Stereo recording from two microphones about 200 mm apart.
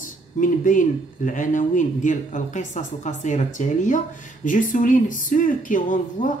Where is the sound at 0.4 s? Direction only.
40° left (ahead or behind).